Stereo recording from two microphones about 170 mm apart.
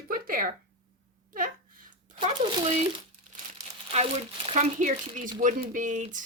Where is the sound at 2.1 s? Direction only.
30° right (ahead or behind).